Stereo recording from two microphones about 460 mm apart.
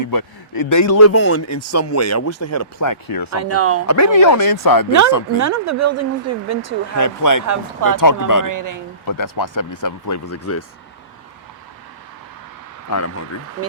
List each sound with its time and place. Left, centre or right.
0.0 s a man's voice: left
3.3 s speech: right
3.8 s a man's voice: left
5.4 s speech: right
6.9 s a man's voice: left
7.4 s speech: right
7.9 s a man's voice: left
8.4 s speech: right
9.0 s a man's voice: left
12.9 s a man's voice: left